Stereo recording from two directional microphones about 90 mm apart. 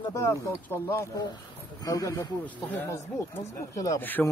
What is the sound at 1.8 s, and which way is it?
Speech, 40° left (ahead or behind).